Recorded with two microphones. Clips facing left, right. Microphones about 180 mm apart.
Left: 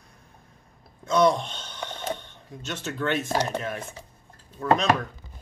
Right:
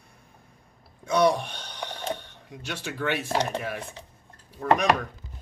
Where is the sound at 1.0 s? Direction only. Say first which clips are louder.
Left 1 dB; 10° right (ahead or behind).